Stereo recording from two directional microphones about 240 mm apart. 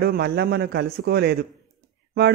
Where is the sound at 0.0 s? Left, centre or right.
Right.